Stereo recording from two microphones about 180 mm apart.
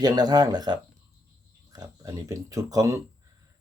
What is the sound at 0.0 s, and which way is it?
Speech, 20° right (ahead or behind).